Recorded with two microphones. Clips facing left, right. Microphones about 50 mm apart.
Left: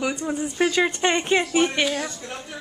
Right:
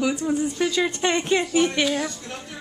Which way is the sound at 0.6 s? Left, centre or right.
Left.